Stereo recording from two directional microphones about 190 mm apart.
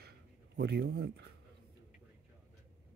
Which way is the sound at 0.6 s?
60° right (ahead or behind).